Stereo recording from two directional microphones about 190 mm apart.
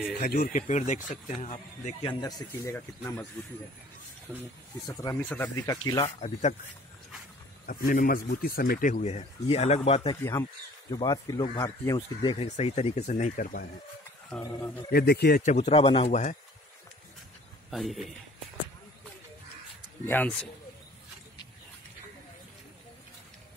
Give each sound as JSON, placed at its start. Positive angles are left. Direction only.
{"t": 0.2, "sound": "speech", "side_deg": 50}
{"t": 2.0, "sound": "a man's voice", "side_deg": 20}
{"t": 4.3, "sound": "speech", "side_deg": 5}
{"t": 5.3, "sound": "a man's voice", "side_deg": 15}
{"t": 6.0, "sound": "speech", "side_deg": 35}
{"t": 7.6, "sound": "a man's voice", "side_deg": 50}
{"t": 10.9, "sound": "a man's voice", "side_deg": 20}
{"t": 12.2, "sound": "speech", "side_deg": 30}
{"t": 14.4, "sound": "a man's voice", "side_deg": 15}
{"t": 14.9, "sound": "a man's voice", "side_deg": 55}
{"t": 15.4, "sound": "speech", "side_deg": 35}
{"t": 17.6, "sound": "speech", "side_deg": 0}
{"t": 20.1, "sound": "a man's voice", "side_deg": 10}